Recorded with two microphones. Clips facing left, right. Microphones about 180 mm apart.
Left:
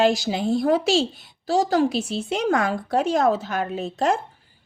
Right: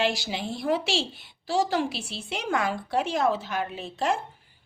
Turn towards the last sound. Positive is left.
turn(degrees=40)  # may be behind; listen again after turning